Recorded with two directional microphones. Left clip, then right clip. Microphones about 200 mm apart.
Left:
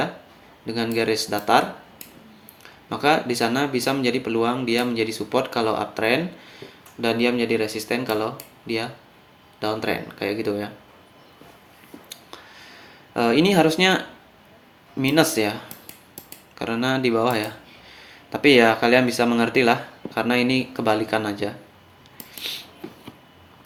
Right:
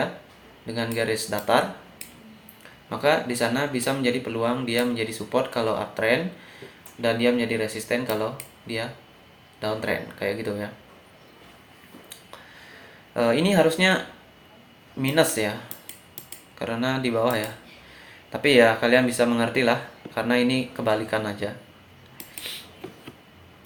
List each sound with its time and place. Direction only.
0.7 s speech: 50° left (ahead or behind)
2.9 s speech: 50° left (ahead or behind)
13.1 s speech: 50° left (ahead or behind)
16.6 s speech: 50° left (ahead or behind)